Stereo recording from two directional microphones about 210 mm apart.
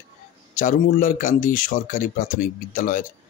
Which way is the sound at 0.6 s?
40° left (ahead or behind).